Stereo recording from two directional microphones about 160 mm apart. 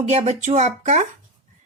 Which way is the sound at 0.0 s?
40° right (ahead or behind).